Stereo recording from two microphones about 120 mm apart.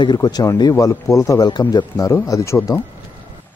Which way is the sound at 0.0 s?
35° left (ahead or behind).